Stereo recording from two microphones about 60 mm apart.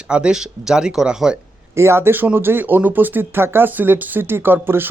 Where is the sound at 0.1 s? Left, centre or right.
Centre.